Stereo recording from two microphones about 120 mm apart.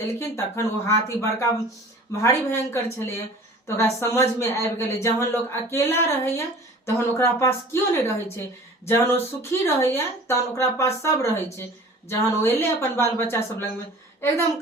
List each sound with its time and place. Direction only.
0.2 s speech: 25° left (ahead or behind)